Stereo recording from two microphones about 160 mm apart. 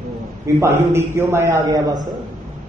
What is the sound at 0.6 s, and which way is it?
A man's voice, 15° right (ahead or behind).